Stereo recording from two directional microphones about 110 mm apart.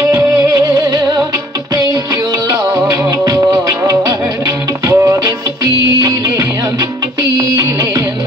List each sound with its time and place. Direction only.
0.0 s music: 25° right (ahead or behind)
2.7 s music: 30° right (ahead or behind)